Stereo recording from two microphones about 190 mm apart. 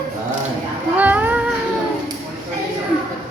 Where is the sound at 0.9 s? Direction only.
10° right (ahead or behind).